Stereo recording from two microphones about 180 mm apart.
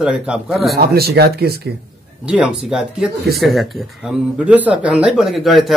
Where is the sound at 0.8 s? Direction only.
60° right (ahead or behind).